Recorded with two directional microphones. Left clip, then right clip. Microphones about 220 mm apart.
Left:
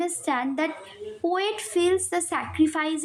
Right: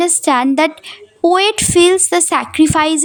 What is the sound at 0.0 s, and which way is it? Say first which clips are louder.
A woman's voice: right 13 dB; 50° right (ahead or behind).